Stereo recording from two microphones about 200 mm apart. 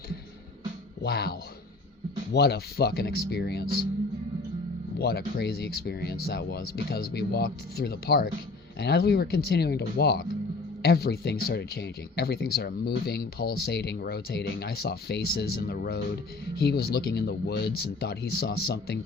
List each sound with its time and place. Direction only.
1.0 s speech: 50° left (ahead or behind)
4.9 s speech: 55° left (ahead or behind)